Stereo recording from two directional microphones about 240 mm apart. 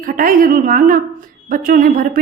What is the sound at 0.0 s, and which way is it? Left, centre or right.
Speech, right.